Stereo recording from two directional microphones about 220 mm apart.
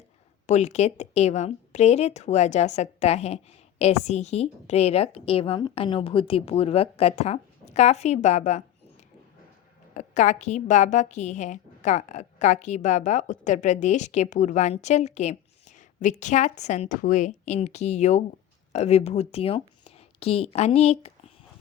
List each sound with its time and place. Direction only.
0.4 s a woman's voice: 30° left (ahead or behind)
9.9 s speech: 35° left (ahead or behind)